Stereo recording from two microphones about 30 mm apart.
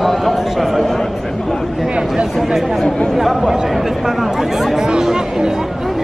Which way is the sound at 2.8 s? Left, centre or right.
Left.